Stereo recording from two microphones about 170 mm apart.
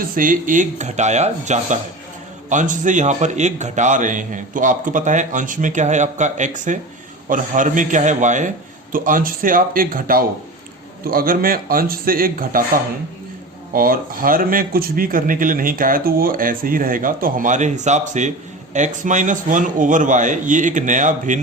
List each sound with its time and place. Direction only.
0.0 s a man's voice: 55° right (ahead or behind)